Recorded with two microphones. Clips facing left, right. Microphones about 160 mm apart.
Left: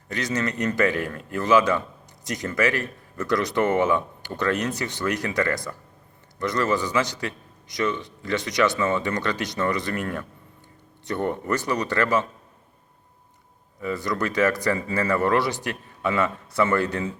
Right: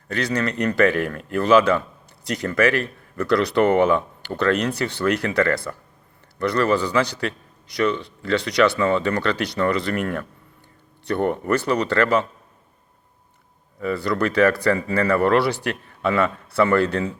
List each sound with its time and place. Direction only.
0.1 s a man's voice: 20° left (ahead or behind)
11.4 s a man's voice: 20° left (ahead or behind)
13.7 s a man's voice: 20° left (ahead or behind)